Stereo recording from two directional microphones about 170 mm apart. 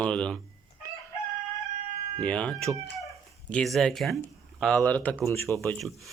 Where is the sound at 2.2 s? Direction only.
5° left (ahead or behind).